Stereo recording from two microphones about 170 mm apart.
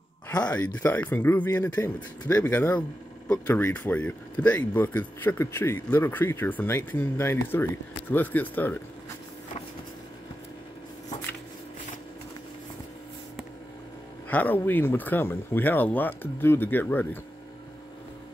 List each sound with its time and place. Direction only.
0.3 s speech: 5° left (ahead or behind)
14.3 s speech: 10° left (ahead or behind)